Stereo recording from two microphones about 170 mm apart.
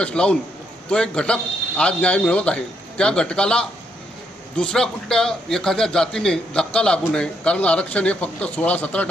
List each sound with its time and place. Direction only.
0.0 s a man's voice: 5° left (ahead or behind)